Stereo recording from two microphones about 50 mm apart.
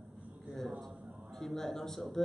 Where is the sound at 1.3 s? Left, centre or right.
Centre.